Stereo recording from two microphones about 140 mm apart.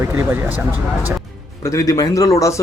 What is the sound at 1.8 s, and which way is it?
Speech, 25° left (ahead or behind).